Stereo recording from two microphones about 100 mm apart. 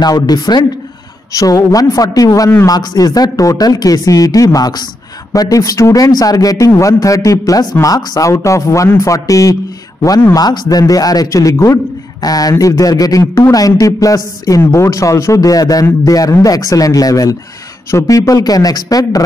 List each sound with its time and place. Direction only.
0.0 s a man's voice: 45° left (ahead or behind)